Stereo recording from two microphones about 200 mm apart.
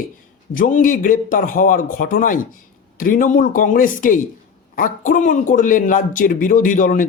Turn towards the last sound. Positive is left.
turn(degrees=40)  # may be behind; listen again after turning